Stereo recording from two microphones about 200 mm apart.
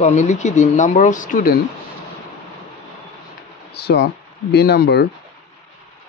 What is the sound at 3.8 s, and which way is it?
Speech, 55° left (ahead or behind).